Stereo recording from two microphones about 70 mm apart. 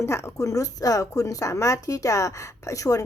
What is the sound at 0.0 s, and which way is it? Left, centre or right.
Speech, left.